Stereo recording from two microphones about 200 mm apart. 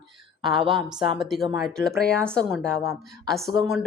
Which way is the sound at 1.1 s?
Centre (ahead or behind).